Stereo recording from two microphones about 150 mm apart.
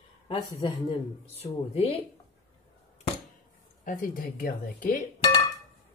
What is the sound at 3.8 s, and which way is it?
Speech, 65° left (ahead or behind).